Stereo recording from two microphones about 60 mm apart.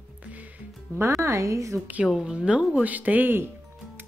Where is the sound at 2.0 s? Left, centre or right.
Centre; by 3.4 s right.